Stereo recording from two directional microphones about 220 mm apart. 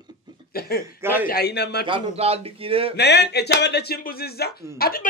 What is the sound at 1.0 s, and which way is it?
Speech, 10° right (ahead or behind).